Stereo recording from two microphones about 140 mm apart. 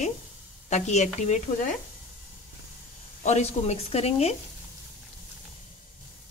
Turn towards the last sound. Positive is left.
turn(degrees=50)  # may be behind; listen again after turning